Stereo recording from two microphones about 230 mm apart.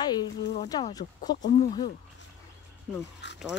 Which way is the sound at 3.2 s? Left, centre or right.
Left.